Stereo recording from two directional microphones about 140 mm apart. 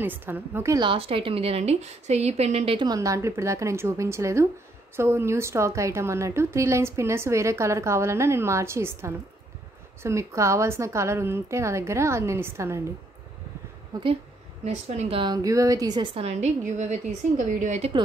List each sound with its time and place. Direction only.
0.0 s a woman's voice: 15° right (ahead or behind)
0.7 s a woman's voice: 40° right (ahead or behind)
2.9 s a woman's voice: 25° right (ahead or behind)
13.9 s a woman's voice: 30° right (ahead or behind)
14.6 s a woman's voice: 50° right (ahead or behind)